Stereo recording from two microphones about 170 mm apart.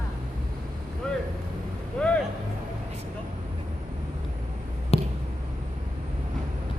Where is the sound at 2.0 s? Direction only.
5° left (ahead or behind).